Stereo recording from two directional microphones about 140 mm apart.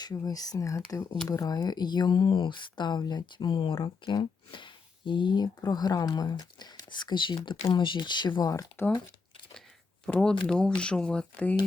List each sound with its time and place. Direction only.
0.0 s speech: 25° left (ahead or behind)
10.1 s speech: 5° left (ahead or behind)